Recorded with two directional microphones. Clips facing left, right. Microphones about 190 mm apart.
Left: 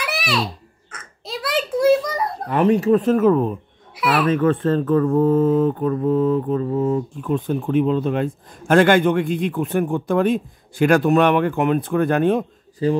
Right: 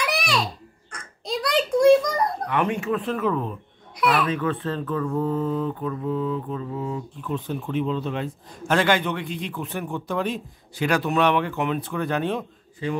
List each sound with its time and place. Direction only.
0.0 s a sound: centre (ahead or behind)
2.4 s speech: 35° left (ahead or behind)
3.9 s babbling: centre (ahead or behind)
4.3 s speech: 50° left (ahead or behind)